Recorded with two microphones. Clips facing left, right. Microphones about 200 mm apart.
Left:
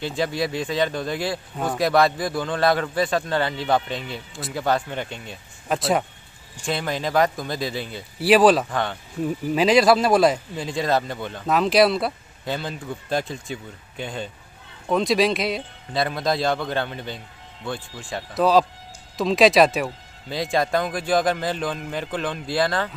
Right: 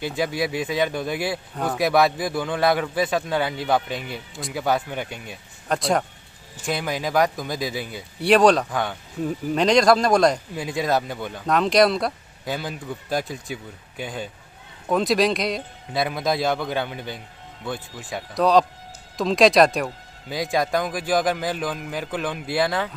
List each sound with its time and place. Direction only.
0.0 s speech: 10° right (ahead or behind)
5.7 s speech: 5° left (ahead or behind)
7.4 s speech: 10° right (ahead or behind)
8.2 s speech: 5° left (ahead or behind)
10.5 s speech: 5° right (ahead or behind)
11.4 s speech: 5° left (ahead or behind)
12.4 s speech: 10° right (ahead or behind)
18.1 s speech: centre (ahead or behind)